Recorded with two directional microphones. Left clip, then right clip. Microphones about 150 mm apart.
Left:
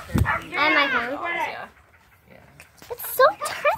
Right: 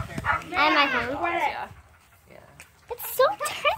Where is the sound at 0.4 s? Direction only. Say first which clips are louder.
Left 1 dB; 5° left (ahead or behind).